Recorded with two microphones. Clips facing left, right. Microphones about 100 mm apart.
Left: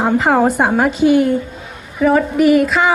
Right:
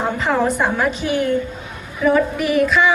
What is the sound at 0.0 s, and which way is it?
Speech, 60° left (ahead or behind).